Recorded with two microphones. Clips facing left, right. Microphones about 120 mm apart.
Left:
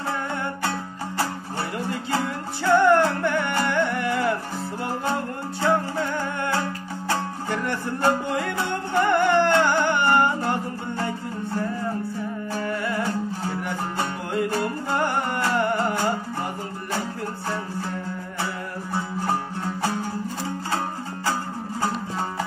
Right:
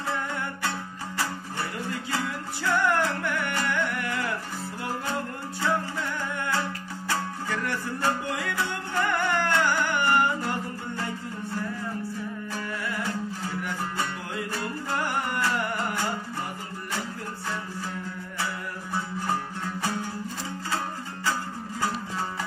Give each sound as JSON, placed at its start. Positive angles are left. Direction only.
{"t": 0.3, "sound": "music", "side_deg": 30}
{"t": 1.1, "sound": "music", "side_deg": 55}
{"t": 2.1, "sound": "music", "side_deg": 25}
{"t": 5.6, "sound": "music", "side_deg": 35}
{"t": 12.5, "sound": "music", "side_deg": 35}